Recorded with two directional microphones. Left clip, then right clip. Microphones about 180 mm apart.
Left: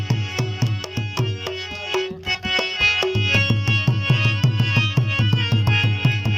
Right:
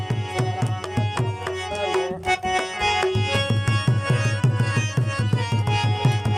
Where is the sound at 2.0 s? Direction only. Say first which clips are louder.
Right 2 dB; 30° right (ahead or behind).